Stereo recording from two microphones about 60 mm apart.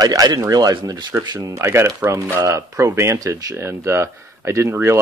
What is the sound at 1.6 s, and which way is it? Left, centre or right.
Speech, right.